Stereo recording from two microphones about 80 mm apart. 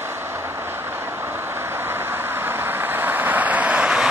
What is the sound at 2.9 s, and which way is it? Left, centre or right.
Vehicle, right.